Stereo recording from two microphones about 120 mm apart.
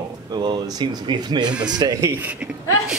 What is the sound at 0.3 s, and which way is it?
Speech, 35° right (ahead or behind).